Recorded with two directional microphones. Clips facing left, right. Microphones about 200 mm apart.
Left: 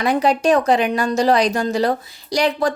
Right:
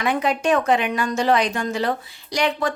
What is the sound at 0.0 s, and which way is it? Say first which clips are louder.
A woman's voice: left 4 dB; 35° left (ahead or behind).